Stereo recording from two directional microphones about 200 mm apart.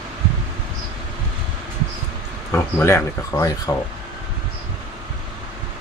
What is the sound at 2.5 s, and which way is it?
Speech, 10° left (ahead or behind).